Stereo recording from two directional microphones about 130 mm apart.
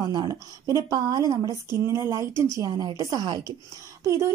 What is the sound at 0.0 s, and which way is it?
A woman's voice, 30° right (ahead or behind).